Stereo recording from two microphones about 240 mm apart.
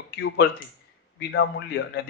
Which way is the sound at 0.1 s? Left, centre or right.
Left.